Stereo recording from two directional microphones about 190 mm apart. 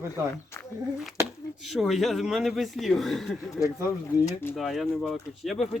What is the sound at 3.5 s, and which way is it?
Speech, 15° left (ahead or behind).